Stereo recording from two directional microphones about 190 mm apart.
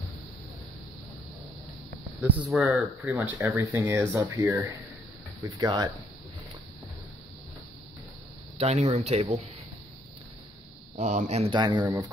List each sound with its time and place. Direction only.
2.2 s speech: 10° right (ahead or behind)
8.5 s speech: 35° right (ahead or behind)
11.0 s speech: 40° right (ahead or behind); by 12.1 s 20° right (ahead or behind)